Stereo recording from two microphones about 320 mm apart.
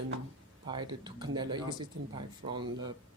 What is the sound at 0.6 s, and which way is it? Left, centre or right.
Speech, centre.